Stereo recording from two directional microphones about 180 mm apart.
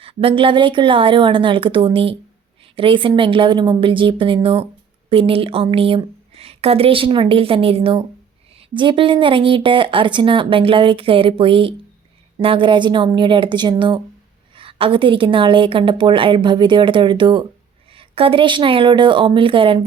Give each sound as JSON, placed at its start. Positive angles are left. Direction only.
{"t": 0.0, "sound": "a woman's voice", "side_deg": -30}